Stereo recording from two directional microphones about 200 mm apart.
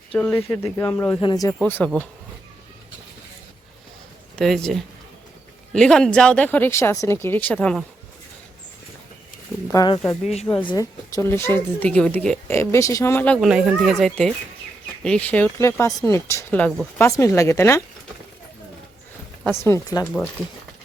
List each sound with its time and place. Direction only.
0.1 s speech: 5° left (ahead or behind)
4.4 s speech: 5° left (ahead or behind)
9.6 s speech: 20° left (ahead or behind)
19.5 s speech: 15° left (ahead or behind)